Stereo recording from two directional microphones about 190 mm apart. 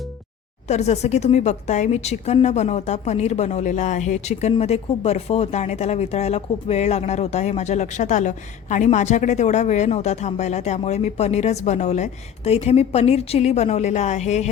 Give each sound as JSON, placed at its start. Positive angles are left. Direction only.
{"t": 0.7, "sound": "a woman's voice", "side_deg": 35}